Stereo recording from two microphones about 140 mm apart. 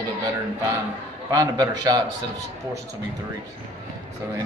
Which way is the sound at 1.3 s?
25° right (ahead or behind).